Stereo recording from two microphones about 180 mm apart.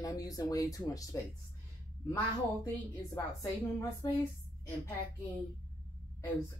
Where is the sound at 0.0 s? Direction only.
20° left (ahead or behind).